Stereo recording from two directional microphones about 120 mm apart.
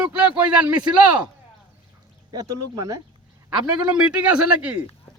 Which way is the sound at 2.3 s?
30° right (ahead or behind).